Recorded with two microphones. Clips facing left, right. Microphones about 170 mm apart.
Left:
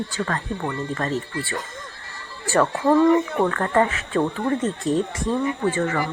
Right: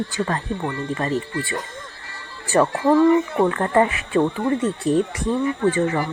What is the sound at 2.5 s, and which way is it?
Speech, 10° right (ahead or behind).